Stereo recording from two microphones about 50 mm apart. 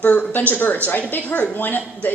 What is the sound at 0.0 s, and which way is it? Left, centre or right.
Speech, left.